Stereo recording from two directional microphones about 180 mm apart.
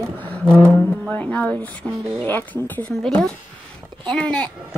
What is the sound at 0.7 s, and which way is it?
A child's voice, 10° left (ahead or behind).